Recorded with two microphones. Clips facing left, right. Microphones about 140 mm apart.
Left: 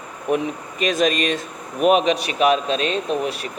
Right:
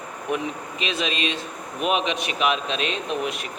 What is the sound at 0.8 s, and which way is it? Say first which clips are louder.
A man's voice: left 7 dB; 45° left (ahead or behind).